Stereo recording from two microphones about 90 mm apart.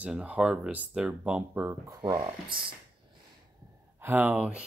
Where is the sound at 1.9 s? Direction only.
40° right (ahead or behind).